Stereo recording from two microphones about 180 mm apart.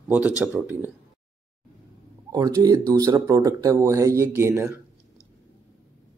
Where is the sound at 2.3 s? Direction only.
20° right (ahead or behind).